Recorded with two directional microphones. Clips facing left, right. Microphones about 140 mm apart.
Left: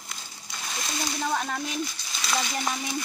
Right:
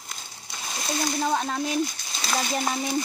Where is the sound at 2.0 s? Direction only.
30° right (ahead or behind).